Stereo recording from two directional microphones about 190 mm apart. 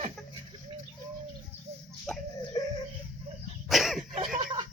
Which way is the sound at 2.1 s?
Centre (ahead or behind).